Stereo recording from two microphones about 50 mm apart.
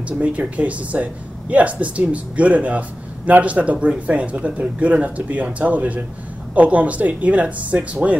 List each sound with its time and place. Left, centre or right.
0.2 s speech: right